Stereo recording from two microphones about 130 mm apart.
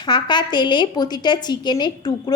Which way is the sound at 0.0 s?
35° left (ahead or behind).